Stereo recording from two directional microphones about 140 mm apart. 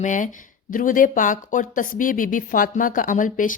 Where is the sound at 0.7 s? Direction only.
75° left (ahead or behind).